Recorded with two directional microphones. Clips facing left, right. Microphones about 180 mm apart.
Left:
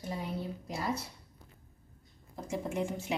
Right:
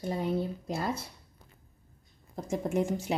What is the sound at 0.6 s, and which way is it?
Speech, 50° right (ahead or behind).